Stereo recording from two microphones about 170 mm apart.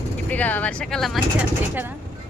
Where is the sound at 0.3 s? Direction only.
10° left (ahead or behind).